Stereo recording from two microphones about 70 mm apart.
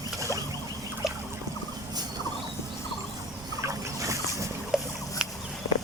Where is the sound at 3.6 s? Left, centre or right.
Right.